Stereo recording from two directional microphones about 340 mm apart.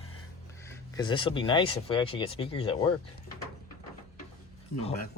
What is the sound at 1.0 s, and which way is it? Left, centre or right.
Speech, centre.